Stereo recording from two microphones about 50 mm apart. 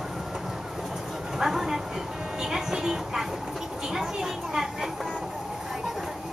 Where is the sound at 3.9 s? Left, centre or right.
Centre.